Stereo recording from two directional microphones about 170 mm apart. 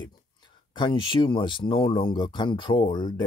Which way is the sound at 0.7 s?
30° left (ahead or behind).